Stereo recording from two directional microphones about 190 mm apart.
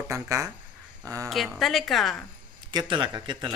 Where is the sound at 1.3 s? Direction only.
Centre (ahead or behind).